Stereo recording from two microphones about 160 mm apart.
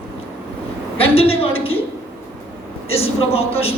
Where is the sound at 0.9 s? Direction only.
35° left (ahead or behind).